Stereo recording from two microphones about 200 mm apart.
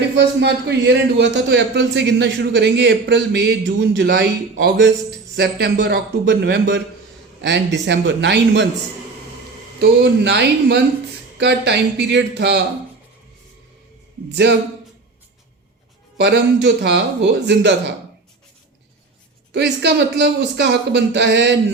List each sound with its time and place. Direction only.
0.0 s a man's voice: 60° right (ahead or behind)
9.8 s a man's voice: 55° right (ahead or behind)
16.1 s a man's voice: 60° right (ahead or behind)
19.5 s a man's voice: 60° right (ahead or behind)